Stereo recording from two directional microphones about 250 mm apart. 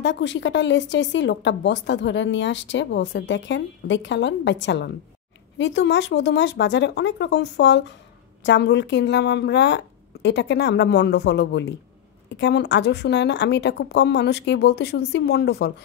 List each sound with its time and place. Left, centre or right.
0.0 s speech: left